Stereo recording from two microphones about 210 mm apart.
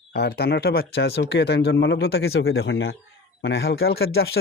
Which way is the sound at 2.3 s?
75° left (ahead or behind).